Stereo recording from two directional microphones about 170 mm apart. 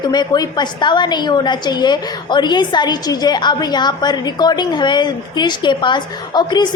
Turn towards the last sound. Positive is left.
turn(degrees=25)  # may be behind; listen again after turning